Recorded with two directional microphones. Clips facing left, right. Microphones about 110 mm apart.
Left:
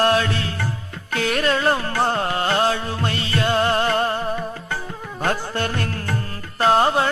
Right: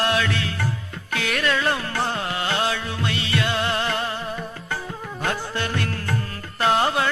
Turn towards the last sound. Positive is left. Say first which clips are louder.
# left 3 dB
turn(degrees=35)  # may be behind; listen again after turning